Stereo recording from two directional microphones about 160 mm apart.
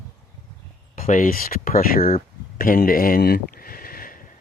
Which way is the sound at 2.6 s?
60° left (ahead or behind).